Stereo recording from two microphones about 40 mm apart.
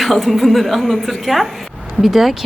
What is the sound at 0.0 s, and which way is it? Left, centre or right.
A woman's voice, centre.